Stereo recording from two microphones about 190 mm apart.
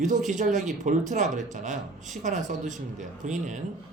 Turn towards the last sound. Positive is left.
turn(degrees=-40)  # may be behind; listen again after turning